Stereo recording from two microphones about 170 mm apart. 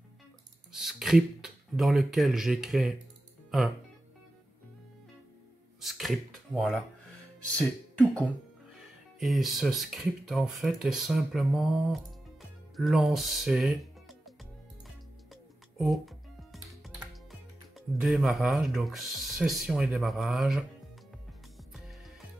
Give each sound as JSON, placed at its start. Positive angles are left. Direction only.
{"t": 0.7, "sound": "speech", "side_deg": -5}
{"t": 5.8, "sound": "speech", "side_deg": 0}
{"t": 15.8, "sound": "music", "side_deg": 0}
{"t": 17.7, "sound": "speech", "side_deg": 0}